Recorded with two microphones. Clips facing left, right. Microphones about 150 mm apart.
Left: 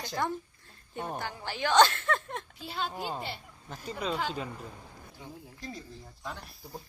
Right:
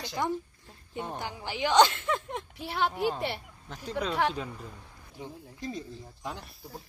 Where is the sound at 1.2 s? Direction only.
15° right (ahead or behind).